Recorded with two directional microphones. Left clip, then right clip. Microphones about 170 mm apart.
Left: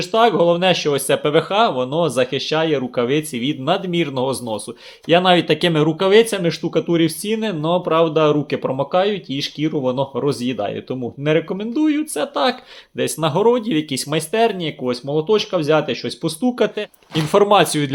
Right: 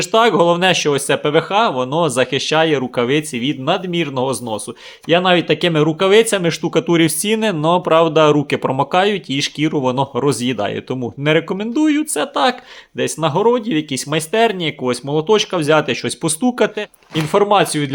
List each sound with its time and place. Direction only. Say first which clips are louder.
0.0 s speech: right 2 dB; 35° right (ahead or behind)
16.6 s speech: right 2 dB; 25° right (ahead or behind)
17.3 s speech: even; 5° right (ahead or behind)